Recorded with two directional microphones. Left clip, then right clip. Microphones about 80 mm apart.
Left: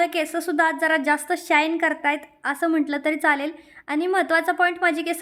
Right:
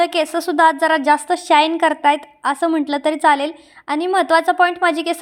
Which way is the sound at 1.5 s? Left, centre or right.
Right.